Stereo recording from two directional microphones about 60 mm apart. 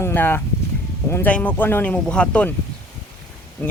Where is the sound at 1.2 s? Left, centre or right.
Left.